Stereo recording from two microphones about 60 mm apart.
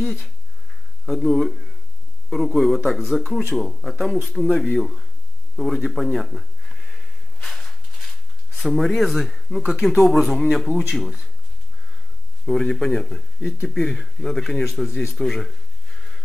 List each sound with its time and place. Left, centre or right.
0.0 s speech: centre
7.4 s a sound: centre
9.7 s speech: centre
12.4 s speech: centre